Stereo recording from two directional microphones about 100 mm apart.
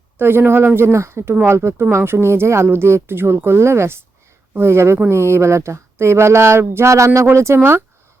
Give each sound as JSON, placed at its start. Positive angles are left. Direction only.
{"t": 0.2, "sound": "speech", "side_deg": -20}